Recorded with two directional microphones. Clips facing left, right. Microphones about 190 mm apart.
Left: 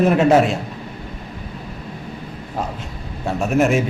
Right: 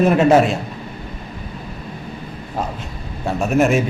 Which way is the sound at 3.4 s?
45° right (ahead or behind).